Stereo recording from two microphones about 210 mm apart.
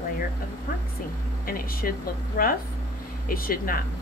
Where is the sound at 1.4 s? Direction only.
45° left (ahead or behind).